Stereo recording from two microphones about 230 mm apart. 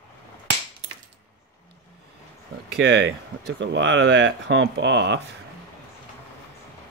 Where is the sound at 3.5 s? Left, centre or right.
Right.